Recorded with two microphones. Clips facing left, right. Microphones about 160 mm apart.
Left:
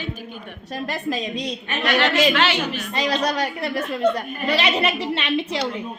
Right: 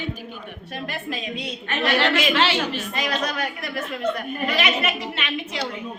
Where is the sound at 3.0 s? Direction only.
35° left (ahead or behind).